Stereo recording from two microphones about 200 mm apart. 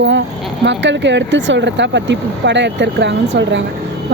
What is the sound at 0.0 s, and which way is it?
Speech, 65° right (ahead or behind).